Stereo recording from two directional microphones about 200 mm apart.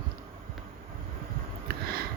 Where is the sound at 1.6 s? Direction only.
50° right (ahead or behind).